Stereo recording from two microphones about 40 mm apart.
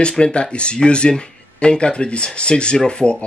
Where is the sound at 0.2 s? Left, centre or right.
Left.